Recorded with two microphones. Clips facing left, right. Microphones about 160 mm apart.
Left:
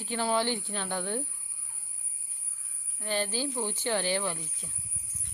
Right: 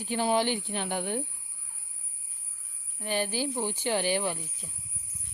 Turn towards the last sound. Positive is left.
turn(degrees=-15)  # may be behind; listen again after turning